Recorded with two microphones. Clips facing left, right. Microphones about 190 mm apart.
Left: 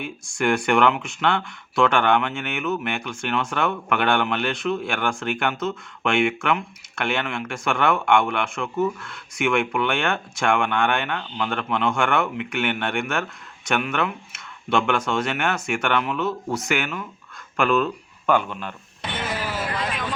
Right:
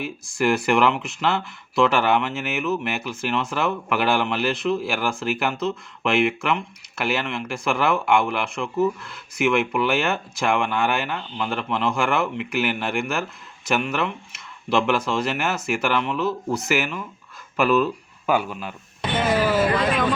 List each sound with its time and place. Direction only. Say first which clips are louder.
0.0 s speech: right 1 dB; centre (ahead or behind)
19.5 s vehicle: right 8 dB; 90° right